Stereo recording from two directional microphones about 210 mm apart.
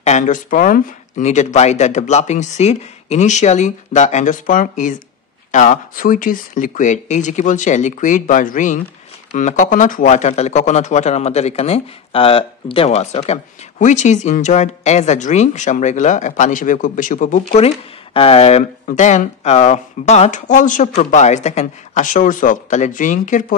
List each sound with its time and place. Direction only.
0.0 s speech: 35° left (ahead or behind)